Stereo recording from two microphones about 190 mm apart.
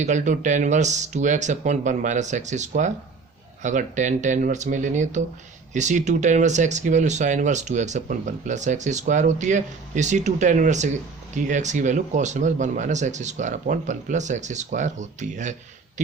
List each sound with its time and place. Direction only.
0.0 s speech: 40° right (ahead or behind)